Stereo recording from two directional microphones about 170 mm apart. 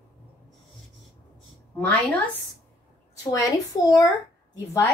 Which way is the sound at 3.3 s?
20° left (ahead or behind).